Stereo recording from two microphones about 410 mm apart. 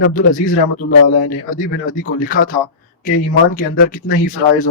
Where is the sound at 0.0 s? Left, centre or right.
Centre.